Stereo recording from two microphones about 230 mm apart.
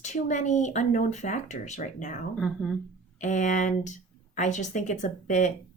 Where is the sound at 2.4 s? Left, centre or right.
Centre.